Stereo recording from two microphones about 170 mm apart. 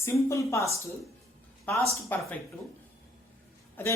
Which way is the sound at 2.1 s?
10° left (ahead or behind).